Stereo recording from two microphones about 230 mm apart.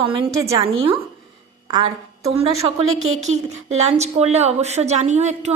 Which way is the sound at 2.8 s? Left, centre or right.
Right.